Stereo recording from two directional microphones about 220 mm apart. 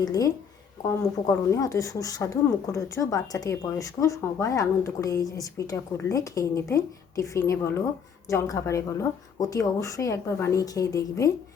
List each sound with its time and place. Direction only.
0.0 s a woman's voice: 15° left (ahead or behind)
1.5 s a woman's voice: 15° left (ahead or behind)